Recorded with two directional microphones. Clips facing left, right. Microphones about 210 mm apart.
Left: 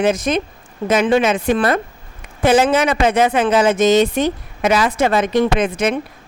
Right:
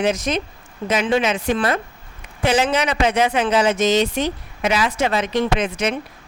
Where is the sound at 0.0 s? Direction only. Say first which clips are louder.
Left 4 dB; 55° left (ahead or behind).